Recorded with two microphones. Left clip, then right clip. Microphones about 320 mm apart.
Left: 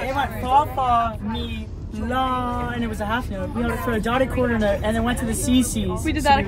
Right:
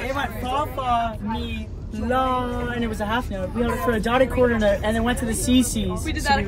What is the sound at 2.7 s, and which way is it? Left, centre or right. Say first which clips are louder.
Speech: even; centre.